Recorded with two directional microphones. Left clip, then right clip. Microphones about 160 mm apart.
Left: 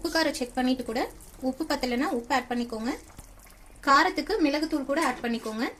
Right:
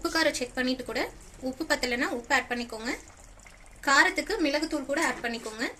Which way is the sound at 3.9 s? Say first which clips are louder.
Left 1 dB; 50° left (ahead or behind).